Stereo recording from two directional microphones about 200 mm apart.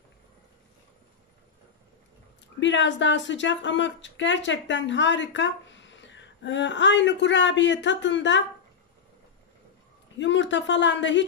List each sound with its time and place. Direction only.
2.6 s a woman's voice: 65° left (ahead or behind)
10.1 s a woman's voice: 65° left (ahead or behind)